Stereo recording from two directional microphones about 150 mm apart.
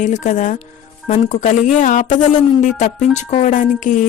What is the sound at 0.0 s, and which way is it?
Speech, 55° left (ahead or behind).